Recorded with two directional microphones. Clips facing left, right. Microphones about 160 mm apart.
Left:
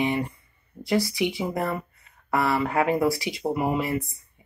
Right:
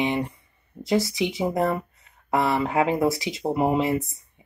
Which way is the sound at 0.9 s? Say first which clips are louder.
Right 1 dB; 20° right (ahead or behind).